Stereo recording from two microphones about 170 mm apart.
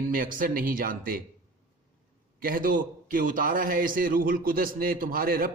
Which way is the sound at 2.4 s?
55° right (ahead or behind).